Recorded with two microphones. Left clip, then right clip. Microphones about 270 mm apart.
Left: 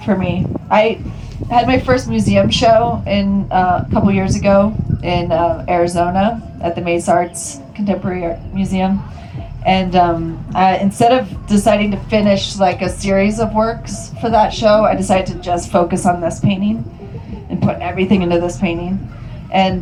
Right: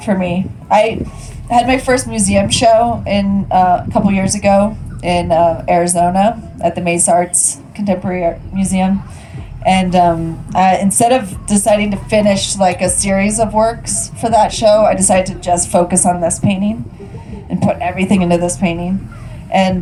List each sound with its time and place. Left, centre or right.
0.0 s a woman's voice: right